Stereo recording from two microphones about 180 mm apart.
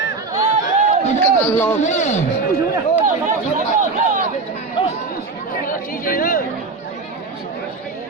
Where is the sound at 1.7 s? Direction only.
40° left (ahead or behind).